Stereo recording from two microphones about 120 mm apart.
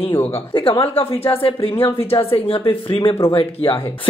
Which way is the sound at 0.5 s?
45° left (ahead or behind).